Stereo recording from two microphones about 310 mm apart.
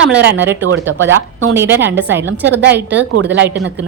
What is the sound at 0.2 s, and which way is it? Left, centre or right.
Speech, right.